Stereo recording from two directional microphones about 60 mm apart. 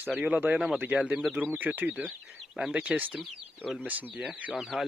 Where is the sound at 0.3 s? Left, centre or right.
Right.